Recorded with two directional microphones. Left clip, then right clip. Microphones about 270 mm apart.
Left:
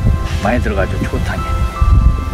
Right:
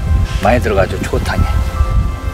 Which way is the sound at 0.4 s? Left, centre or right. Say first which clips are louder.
Right 5 dB; right.